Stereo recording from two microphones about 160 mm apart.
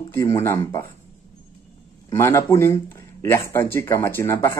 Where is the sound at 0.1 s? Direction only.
20° left (ahead or behind).